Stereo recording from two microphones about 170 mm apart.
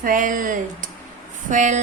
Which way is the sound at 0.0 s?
50° right (ahead or behind).